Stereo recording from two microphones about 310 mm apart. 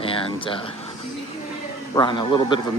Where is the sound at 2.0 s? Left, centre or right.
Centre.